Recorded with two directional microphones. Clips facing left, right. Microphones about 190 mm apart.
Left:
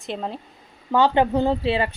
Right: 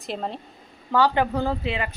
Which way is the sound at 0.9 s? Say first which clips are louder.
Left 3 dB; 25° left (ahead or behind).